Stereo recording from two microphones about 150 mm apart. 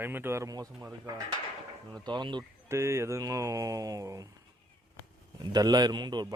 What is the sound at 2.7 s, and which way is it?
Speech, 20° right (ahead or behind).